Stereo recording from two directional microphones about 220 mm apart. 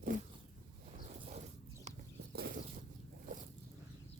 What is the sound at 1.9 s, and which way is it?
Horse, 30° right (ahead or behind).